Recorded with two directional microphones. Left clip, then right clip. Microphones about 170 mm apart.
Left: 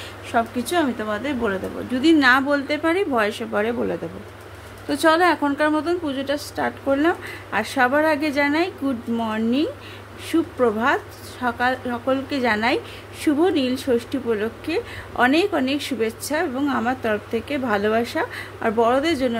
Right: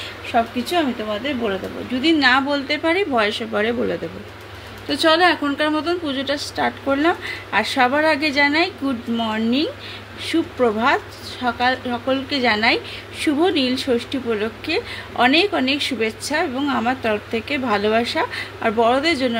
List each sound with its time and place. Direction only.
0.3 s a woman's voice: 5° left (ahead or behind)
2.0 s a woman's voice: 20° left (ahead or behind)
11.4 s a woman's voice: 10° left (ahead or behind)